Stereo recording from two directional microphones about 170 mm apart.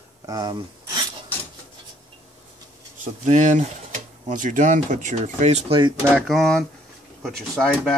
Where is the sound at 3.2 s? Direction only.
45° right (ahead or behind).